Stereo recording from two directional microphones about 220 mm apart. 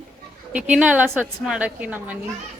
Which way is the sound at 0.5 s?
5° right (ahead or behind).